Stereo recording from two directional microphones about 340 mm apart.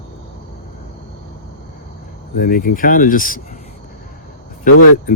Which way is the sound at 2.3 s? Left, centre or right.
Left.